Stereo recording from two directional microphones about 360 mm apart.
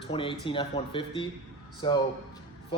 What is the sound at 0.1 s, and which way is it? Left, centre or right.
A man's voice, centre.